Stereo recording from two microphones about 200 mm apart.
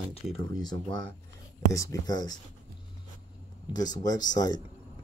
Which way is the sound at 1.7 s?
15° left (ahead or behind).